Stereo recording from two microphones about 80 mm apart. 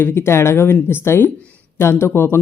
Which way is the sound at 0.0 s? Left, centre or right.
Left.